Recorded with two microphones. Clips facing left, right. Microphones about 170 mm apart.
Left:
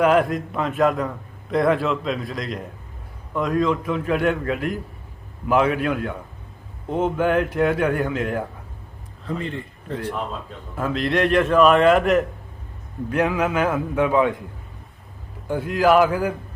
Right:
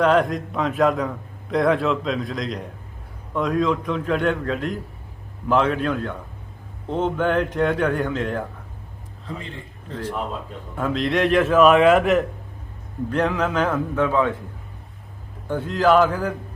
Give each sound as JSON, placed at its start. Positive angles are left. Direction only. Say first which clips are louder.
{"t": 0.0, "sound": "a man's voice", "louder": "left 1 dB", "side_deg": 5}
{"t": 9.2, "sound": "a man's voice", "louder": "left 6 dB", "side_deg": 60}
{"t": 10.8, "sound": "a man's voice", "louder": "even", "side_deg": 0}
{"t": 15.4, "sound": "a man's voice", "louder": "left 1 dB", "side_deg": 10}